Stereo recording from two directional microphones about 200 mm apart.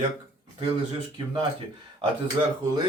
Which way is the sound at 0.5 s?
25° right (ahead or behind).